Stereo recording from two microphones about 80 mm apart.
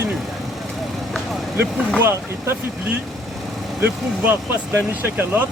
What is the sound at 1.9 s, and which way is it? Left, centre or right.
Speech, right.